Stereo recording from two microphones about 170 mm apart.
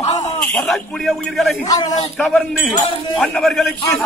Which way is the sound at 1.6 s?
20° left (ahead or behind).